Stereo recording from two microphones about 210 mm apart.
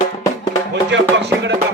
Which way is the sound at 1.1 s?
55° right (ahead or behind).